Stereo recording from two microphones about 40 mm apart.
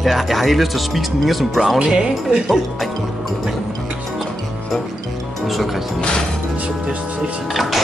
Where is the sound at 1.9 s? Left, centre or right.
Right.